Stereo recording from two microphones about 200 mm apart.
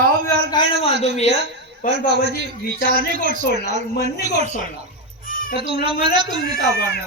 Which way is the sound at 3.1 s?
40° right (ahead or behind).